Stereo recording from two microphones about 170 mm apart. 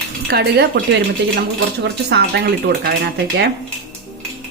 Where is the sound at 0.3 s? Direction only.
70° right (ahead or behind).